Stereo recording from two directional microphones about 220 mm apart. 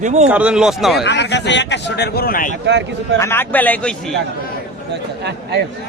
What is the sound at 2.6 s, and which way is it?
Speech, 50° right (ahead or behind).